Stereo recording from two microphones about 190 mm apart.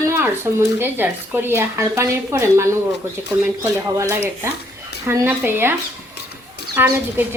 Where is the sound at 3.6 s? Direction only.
15° right (ahead or behind).